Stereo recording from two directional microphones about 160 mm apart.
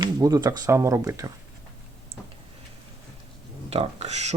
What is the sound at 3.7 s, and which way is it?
Speech, 40° right (ahead or behind).